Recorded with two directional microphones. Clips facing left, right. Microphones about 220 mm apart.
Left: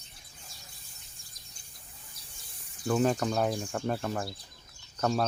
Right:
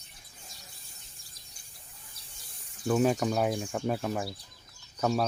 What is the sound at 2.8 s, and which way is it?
Speech, 5° right (ahead or behind).